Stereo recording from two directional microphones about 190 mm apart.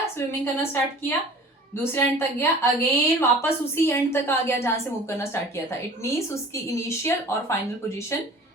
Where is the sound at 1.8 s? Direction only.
10° left (ahead or behind).